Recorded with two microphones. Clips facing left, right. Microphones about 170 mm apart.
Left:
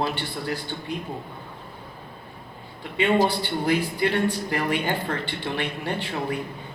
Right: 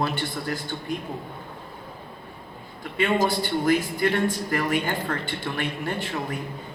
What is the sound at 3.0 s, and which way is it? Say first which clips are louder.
A man's voice: left 2 dB; 45° right (ahead or behind).